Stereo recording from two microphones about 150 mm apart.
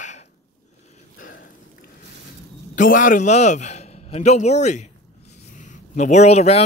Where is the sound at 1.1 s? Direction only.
75° left (ahead or behind).